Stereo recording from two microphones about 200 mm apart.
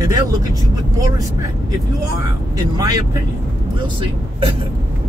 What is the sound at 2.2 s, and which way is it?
Speech, 15° right (ahead or behind).